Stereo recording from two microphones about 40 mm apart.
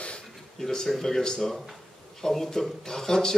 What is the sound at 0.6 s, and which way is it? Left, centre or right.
Speech, centre.